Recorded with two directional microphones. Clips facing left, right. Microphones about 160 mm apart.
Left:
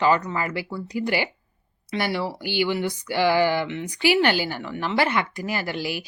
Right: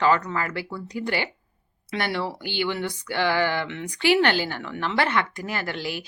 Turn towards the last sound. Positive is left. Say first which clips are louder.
# left 2 dB
turn(degrees=10)  # may be behind; listen again after turning